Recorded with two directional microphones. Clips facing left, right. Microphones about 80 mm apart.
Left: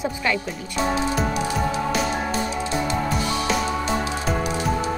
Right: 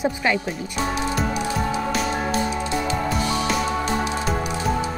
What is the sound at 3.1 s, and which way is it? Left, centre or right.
Music, centre.